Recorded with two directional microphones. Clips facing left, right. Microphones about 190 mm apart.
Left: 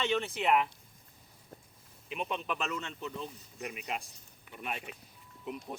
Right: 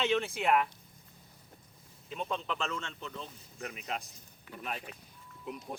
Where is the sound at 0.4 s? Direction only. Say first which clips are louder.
Left 1 dB; centre (ahead or behind).